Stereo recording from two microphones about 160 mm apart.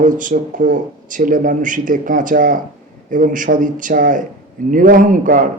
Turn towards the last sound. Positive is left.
turn(degrees=-55)  # may be behind; listen again after turning